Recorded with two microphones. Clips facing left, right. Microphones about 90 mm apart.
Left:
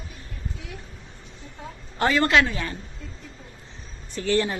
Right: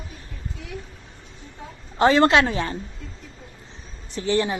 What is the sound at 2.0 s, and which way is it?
Speech, 25° right (ahead or behind).